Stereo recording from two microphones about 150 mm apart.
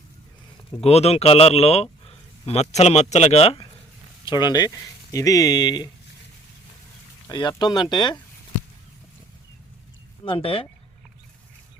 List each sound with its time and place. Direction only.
0.8 s a man's voice: 45° left (ahead or behind)
4.3 s speech: 30° left (ahead or behind)
7.3 s speech: 30° left (ahead or behind)
10.2 s speech: 35° left (ahead or behind)